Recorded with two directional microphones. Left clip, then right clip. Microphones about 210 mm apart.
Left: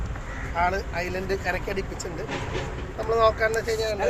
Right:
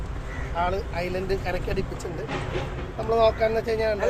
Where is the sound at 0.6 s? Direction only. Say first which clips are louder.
Left 2 dB; 15° right (ahead or behind).